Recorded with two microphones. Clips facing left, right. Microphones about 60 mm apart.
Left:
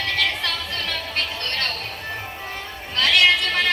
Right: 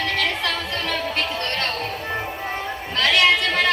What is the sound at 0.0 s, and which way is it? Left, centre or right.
Music, right.